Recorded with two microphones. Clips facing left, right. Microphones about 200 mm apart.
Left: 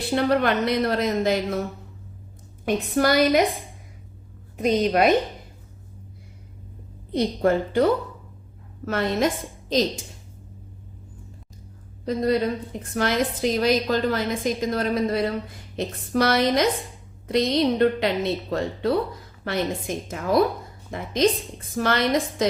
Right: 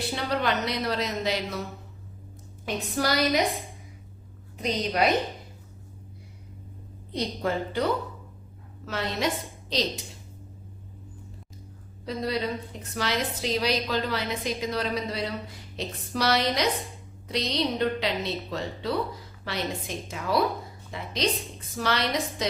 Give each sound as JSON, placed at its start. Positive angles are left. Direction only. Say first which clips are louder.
{"t": 0.1, "sound": "a woman's voice", "louder": "left 9 dB", "side_deg": 55}
{"t": 2.6, "sound": "a woman's voice", "louder": "left 7 dB", "side_deg": 55}
{"t": 4.5, "sound": "a woman's voice", "louder": "left 7 dB", "side_deg": 50}
{"t": 7.1, "sound": "a woman's voice", "louder": "left 8 dB", "side_deg": 50}
{"t": 12.0, "sound": "a woman's voice", "louder": "left 7 dB", "side_deg": 50}